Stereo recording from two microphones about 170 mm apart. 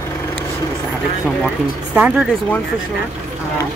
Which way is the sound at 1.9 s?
5° right (ahead or behind).